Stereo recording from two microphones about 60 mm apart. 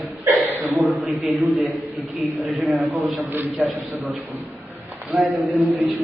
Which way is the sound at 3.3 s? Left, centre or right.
Right.